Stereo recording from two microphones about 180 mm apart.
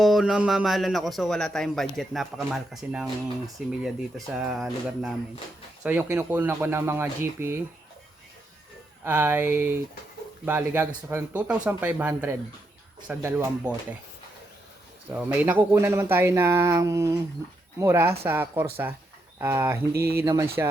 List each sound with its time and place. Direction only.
0.0 s a man's voice: centre (ahead or behind)
9.0 s speech: 10° right (ahead or behind)
15.1 s speech: 10° right (ahead or behind)